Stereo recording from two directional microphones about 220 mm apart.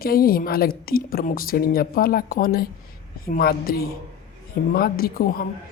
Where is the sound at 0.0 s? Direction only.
40° left (ahead or behind).